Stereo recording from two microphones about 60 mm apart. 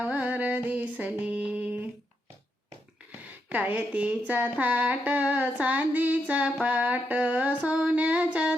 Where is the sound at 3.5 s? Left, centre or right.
Right.